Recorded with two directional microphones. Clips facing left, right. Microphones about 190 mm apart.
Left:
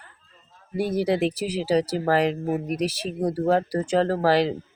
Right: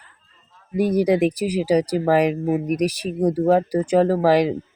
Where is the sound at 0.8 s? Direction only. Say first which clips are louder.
Right 5 dB; 15° right (ahead or behind).